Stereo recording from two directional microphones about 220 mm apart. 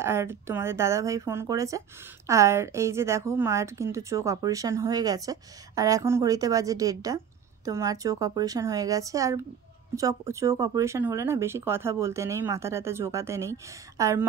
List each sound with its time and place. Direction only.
0.0 s a woman's voice: 10° right (ahead or behind)